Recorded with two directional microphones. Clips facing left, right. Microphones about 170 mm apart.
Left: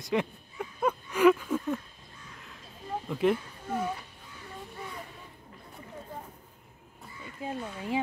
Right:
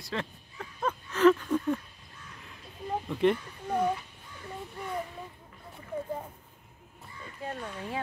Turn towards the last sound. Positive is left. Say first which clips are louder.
# left 3 dB
turn(degrees=10)  # may be behind; listen again after turning